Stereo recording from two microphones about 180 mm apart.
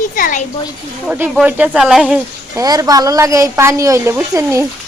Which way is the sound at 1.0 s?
10° right (ahead or behind).